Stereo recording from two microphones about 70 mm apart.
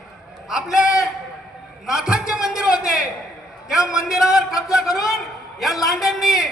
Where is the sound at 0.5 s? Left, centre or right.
Centre.